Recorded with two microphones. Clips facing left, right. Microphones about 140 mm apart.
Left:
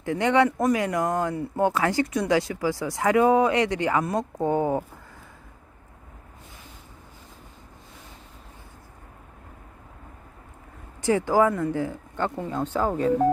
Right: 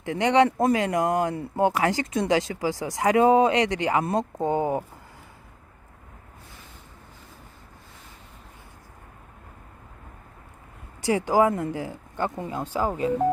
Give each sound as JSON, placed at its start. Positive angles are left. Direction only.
{"t": 0.0, "sound": "speech", "side_deg": -20}
{"t": 11.0, "sound": "speech", "side_deg": -15}